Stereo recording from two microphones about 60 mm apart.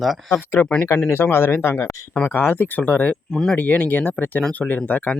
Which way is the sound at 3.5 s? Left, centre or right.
Left.